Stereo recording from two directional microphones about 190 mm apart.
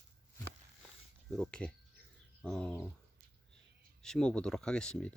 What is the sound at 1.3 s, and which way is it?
Speech, 5° left (ahead or behind).